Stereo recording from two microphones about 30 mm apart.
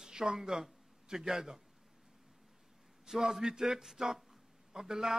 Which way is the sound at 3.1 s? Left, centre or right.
Centre.